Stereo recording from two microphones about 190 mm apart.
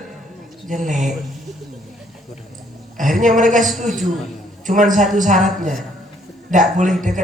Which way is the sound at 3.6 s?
Centre (ahead or behind).